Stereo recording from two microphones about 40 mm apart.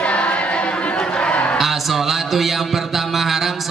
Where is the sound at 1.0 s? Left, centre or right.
Left.